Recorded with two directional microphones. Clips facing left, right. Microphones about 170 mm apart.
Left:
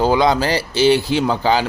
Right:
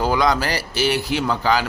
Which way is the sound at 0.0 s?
25° left (ahead or behind).